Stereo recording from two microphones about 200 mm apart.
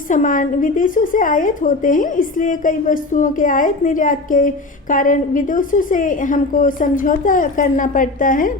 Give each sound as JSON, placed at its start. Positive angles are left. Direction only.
{"t": 0.1, "sound": "a woman's voice", "side_deg": 40}